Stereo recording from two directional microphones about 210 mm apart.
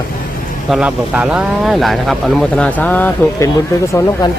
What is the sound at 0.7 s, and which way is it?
Speech, 5° right (ahead or behind).